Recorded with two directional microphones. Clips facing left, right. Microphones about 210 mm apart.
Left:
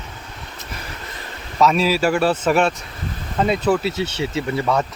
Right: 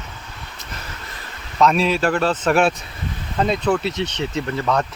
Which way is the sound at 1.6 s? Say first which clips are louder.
Even; 5° left (ahead or behind).